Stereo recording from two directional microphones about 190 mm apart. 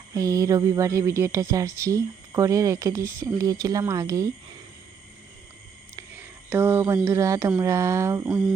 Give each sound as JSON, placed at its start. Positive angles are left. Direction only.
{"t": 0.1, "sound": "speech", "side_deg": -20}
{"t": 6.0, "sound": "speech", "side_deg": -10}